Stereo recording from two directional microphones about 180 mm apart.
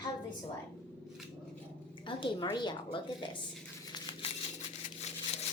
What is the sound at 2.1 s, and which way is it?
A woman's voice, 25° left (ahead or behind).